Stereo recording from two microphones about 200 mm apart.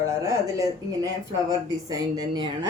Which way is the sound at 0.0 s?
15° right (ahead or behind).